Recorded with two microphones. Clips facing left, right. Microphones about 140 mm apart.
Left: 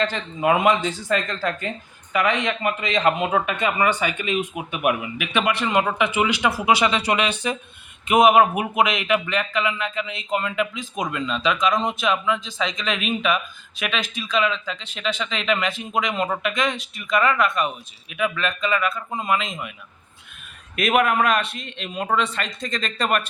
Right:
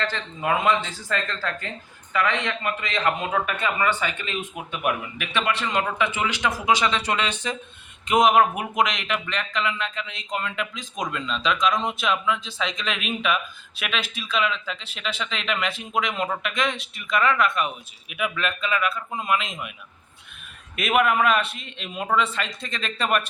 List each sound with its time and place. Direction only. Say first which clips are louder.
0.0 s a man's voice: left 5 dB; 15° left (ahead or behind); by 19.5 s centre (ahead or behind)
20.7 s speech: left 2 dB; 5° right (ahead or behind)